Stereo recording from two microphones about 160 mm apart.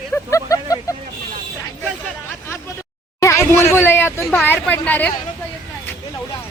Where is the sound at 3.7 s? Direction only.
15° left (ahead or behind).